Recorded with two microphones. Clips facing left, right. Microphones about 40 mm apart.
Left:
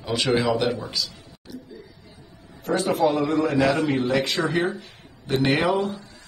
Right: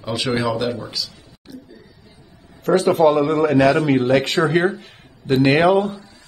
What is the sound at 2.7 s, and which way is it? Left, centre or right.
A man's voice, right.